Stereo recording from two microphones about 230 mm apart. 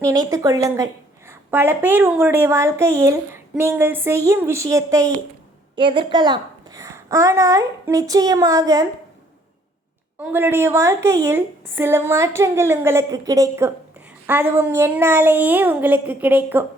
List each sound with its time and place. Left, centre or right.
0.0 s a woman's voice: centre
10.2 s a woman's voice: centre